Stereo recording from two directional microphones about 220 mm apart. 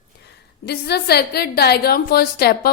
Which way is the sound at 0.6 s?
50° left (ahead or behind).